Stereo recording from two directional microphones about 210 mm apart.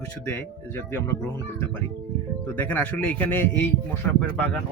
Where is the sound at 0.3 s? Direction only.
10° left (ahead or behind).